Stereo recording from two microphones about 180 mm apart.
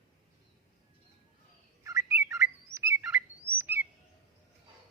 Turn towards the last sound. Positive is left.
turn(degrees=-10)  # may be behind; listen again after turning